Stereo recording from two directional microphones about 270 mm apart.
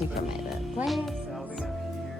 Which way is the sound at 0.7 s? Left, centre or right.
Centre.